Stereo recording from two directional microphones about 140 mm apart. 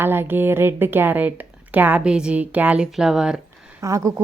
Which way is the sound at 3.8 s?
20° right (ahead or behind).